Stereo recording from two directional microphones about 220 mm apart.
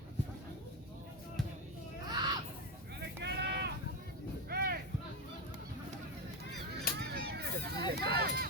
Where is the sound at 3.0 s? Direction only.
50° right (ahead or behind).